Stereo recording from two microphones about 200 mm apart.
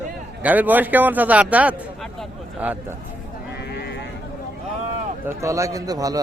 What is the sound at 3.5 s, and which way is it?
Sheep, 55° left (ahead or behind).